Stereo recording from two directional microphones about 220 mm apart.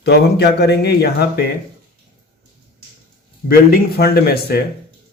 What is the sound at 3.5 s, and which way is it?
Speech, 45° left (ahead or behind).